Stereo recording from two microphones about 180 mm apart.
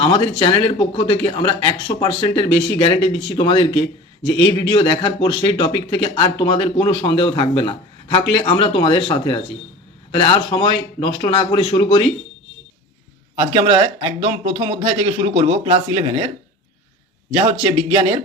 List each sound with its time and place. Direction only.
0.0 s speech: 30° left (ahead or behind)
13.3 s speech: 30° right (ahead or behind)
17.3 s speech: 30° right (ahead or behind)